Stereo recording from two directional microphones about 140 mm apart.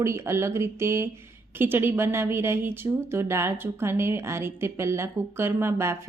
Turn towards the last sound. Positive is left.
turn(degrees=-20)  # may be behind; listen again after turning